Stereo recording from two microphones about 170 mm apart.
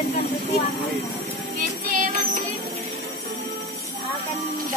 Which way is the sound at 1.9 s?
50° right (ahead or behind).